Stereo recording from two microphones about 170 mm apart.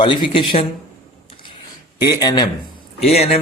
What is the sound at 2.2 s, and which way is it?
Speech, 25° left (ahead or behind).